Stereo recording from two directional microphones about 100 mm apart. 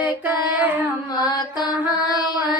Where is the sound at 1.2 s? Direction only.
45° left (ahead or behind).